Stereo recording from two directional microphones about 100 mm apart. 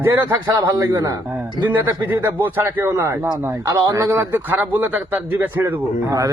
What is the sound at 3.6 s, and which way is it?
A man's voice, 35° right (ahead or behind).